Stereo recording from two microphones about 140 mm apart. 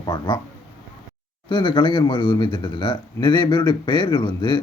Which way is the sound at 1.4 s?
35° left (ahead or behind).